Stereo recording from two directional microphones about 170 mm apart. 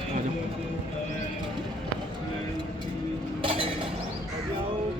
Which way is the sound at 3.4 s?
30° right (ahead or behind).